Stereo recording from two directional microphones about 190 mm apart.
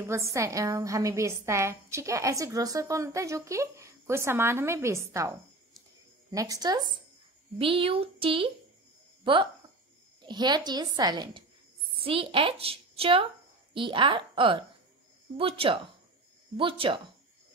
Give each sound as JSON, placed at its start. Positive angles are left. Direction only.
{"t": 0.0, "sound": "a woman's voice", "side_deg": -15}
{"t": 6.3, "sound": "a woman's voice", "side_deg": -20}